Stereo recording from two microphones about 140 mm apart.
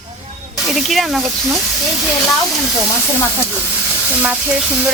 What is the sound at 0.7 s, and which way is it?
Speech, centre (ahead or behind).